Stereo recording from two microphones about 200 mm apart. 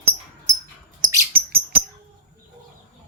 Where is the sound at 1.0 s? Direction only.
45° right (ahead or behind).